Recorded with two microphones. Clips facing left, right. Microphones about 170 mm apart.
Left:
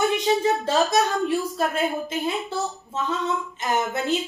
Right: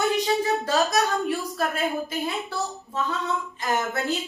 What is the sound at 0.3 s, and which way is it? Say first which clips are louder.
A woman's voice: left 2 dB; 20° left (ahead or behind).